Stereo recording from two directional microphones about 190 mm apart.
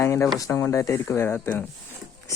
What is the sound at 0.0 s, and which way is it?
Speech, 15° left (ahead or behind).